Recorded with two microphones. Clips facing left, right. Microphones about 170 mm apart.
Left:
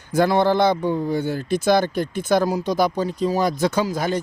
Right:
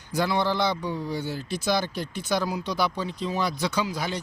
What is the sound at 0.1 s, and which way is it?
Speech, 50° left (ahead or behind).